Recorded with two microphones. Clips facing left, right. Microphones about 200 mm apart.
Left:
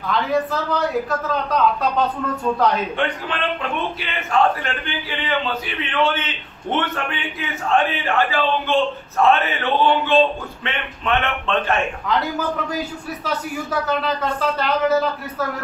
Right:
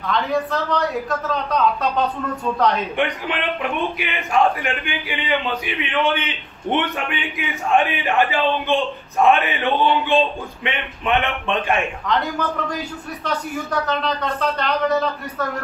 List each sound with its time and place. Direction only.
0.1 s a man's voice: centre (ahead or behind)
3.0 s a man's voice: 15° right (ahead or behind)
11.8 s a man's voice: 5° left (ahead or behind)